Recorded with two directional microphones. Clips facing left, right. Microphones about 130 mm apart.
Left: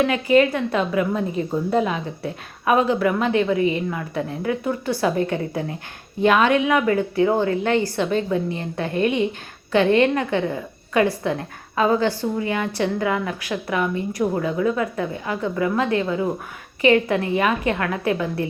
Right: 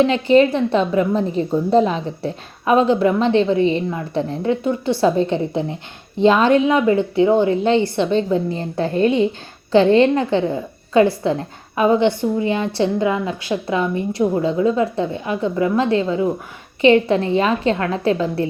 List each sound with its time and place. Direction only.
0.0 s a woman's voice: 25° right (ahead or behind)